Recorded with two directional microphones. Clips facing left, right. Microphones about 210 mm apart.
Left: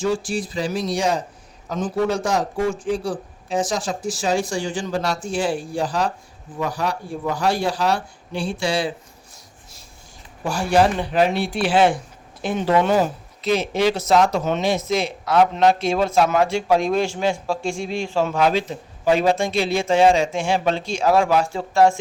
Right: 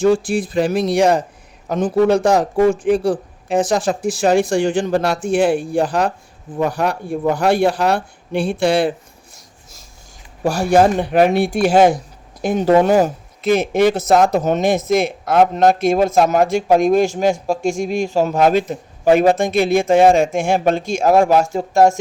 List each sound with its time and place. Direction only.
0.0 s speech: 55° right (ahead or behind)
10.4 s speech: 45° right (ahead or behind)